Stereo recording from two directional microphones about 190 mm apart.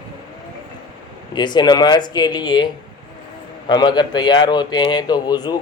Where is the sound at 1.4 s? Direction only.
25° left (ahead or behind).